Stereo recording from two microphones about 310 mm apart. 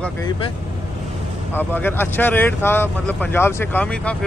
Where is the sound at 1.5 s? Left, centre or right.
Centre.